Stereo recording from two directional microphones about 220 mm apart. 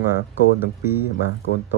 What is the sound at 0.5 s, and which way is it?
Speech, 10° right (ahead or behind).